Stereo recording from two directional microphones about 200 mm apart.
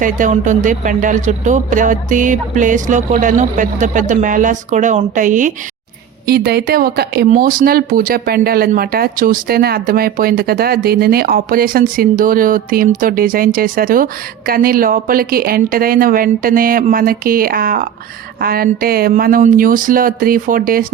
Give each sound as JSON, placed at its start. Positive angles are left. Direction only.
{"t": 0.0, "sound": "speech", "side_deg": -40}
{"t": 6.2, "sound": "speech", "side_deg": -50}